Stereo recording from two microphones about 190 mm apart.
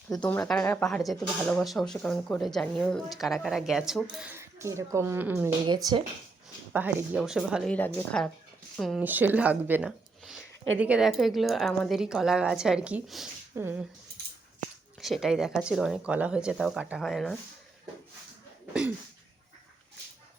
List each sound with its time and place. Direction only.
0.1 s speech: 10° left (ahead or behind)
4.2 s speech: 15° right (ahead or behind)
5.6 s speech: 25° right (ahead or behind)
6.7 s speech: 10° right (ahead or behind)
9.0 s speech: 10° right (ahead or behind)
15.0 s speech: centre (ahead or behind)